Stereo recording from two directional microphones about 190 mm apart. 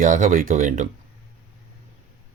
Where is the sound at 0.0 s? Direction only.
45° right (ahead or behind).